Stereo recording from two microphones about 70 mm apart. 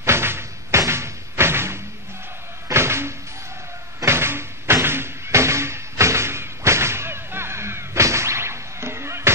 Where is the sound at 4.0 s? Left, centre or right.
Right.